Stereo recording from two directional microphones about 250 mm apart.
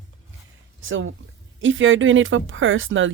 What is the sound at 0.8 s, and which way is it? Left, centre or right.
Speech, right.